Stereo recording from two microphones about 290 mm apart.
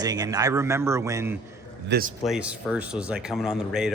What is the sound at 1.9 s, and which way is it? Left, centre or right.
Speech, right.